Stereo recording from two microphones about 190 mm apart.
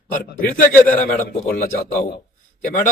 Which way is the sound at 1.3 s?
55° left (ahead or behind).